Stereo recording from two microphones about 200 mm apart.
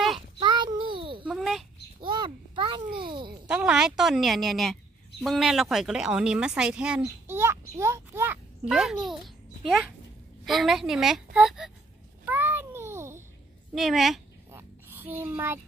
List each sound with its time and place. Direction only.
0.4 s child singing: 20° right (ahead or behind)
1.2 s a sound: centre (ahead or behind)
2.0 s a sound: 25° right (ahead or behind)
3.4 s a woman's voice: 5° right (ahead or behind)
12.3 s babbling: 10° right (ahead or behind)
13.7 s a woman's voice: centre (ahead or behind)
14.5 s oink: 10° right (ahead or behind)